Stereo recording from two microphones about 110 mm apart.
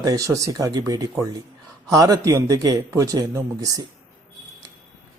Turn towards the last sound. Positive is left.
turn(degrees=-35)  # may be behind; listen again after turning